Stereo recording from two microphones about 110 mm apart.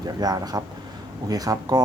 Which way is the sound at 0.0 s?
35° right (ahead or behind).